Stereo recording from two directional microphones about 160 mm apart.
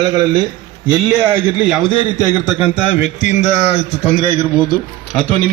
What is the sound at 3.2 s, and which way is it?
Speech, 45° left (ahead or behind).